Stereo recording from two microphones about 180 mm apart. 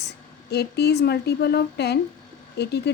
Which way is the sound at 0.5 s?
65° left (ahead or behind).